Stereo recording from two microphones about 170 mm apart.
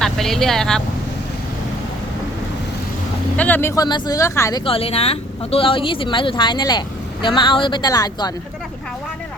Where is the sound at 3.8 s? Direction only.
25° left (ahead or behind).